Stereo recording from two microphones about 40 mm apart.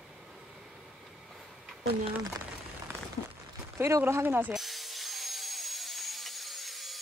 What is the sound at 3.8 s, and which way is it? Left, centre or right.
Speech, right.